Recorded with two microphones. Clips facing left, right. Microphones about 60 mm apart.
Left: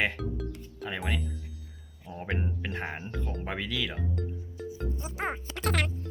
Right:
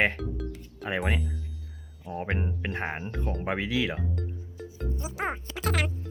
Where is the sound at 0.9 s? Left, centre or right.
Right.